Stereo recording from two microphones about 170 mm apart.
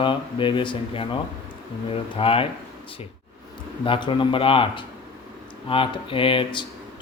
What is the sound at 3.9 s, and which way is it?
Speech, 30° left (ahead or behind).